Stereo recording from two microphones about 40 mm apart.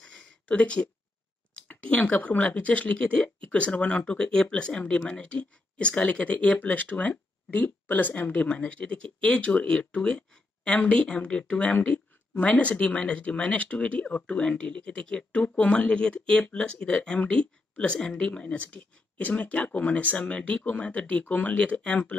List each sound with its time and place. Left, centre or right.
0.5 s speech: left
15.4 s speech: left
17.2 s speech: left